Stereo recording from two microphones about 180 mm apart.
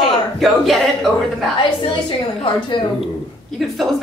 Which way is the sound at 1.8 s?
30° left (ahead or behind).